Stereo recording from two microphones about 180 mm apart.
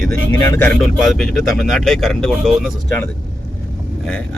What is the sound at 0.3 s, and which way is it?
Speech, 15° left (ahead or behind).